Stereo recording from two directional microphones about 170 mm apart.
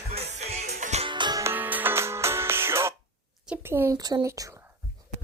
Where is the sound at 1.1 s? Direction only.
25° right (ahead or behind).